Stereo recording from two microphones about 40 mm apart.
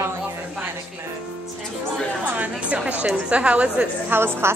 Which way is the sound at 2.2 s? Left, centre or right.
Right.